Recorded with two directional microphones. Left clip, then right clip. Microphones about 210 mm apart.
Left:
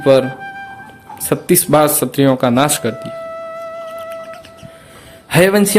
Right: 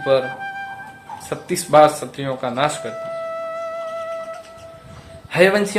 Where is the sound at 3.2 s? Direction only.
Centre (ahead or behind).